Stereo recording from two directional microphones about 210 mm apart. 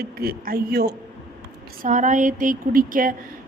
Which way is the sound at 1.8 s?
35° right (ahead or behind).